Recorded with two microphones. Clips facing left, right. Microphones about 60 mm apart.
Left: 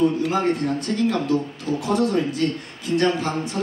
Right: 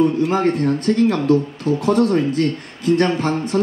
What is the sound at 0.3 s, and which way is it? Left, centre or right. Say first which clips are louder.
Speech: right 4 dB; right.